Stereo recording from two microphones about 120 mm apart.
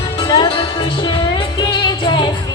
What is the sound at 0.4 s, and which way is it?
Music, 45° left (ahead or behind).